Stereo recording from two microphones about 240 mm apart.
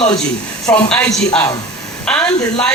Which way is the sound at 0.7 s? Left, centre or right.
Centre.